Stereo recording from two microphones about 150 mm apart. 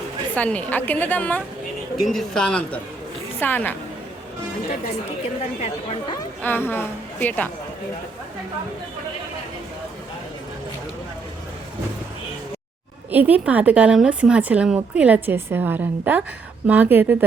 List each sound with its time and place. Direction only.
0.3 s a woman's voice: 10° left (ahead or behind)
6.4 s a woman's voice: 15° left (ahead or behind)
13.1 s a woman's voice: 10° right (ahead or behind)